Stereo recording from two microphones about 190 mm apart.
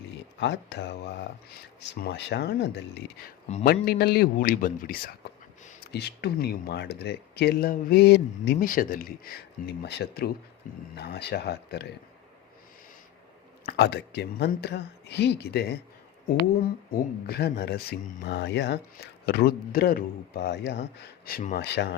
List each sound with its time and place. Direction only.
0.3 s speech: 70° left (ahead or behind)
3.5 s a man's voice: 50° left (ahead or behind)
5.8 s speech: 60° left (ahead or behind)
13.7 s speech: 60° left (ahead or behind)
16.9 s speech: 55° left (ahead or behind)
21.2 s speech: 50° left (ahead or behind)